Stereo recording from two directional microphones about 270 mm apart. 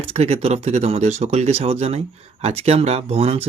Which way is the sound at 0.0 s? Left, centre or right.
Right.